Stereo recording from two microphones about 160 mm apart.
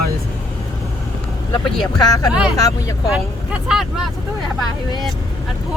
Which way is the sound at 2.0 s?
25° left (ahead or behind).